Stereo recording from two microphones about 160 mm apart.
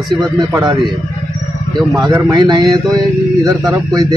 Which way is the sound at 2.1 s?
25° right (ahead or behind).